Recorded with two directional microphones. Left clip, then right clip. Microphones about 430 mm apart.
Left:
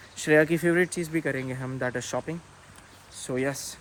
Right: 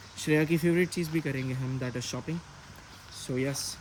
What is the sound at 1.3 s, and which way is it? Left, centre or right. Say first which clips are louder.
Speech: left 4 dB; left.